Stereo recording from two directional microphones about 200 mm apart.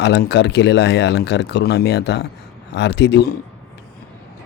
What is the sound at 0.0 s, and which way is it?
A man's voice, 60° left (ahead or behind).